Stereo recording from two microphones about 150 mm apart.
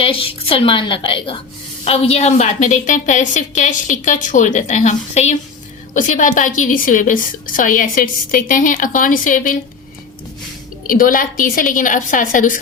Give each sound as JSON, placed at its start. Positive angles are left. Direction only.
{"t": 0.0, "sound": "a woman's voice", "side_deg": 35}
{"t": 10.8, "sound": "a woman's voice", "side_deg": 65}